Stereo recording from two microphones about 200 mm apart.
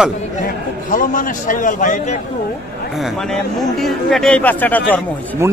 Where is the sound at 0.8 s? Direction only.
40° left (ahead or behind).